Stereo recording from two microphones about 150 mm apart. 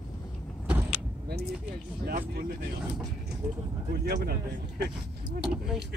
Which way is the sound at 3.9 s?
90° right.